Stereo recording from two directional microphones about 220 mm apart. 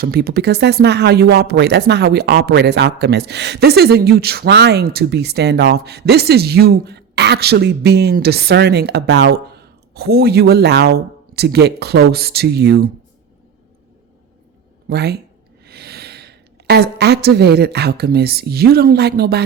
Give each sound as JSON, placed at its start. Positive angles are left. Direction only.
{"t": 0.0, "sound": "speech", "side_deg": -45}
{"t": 14.8, "sound": "a woman's voice", "side_deg": -45}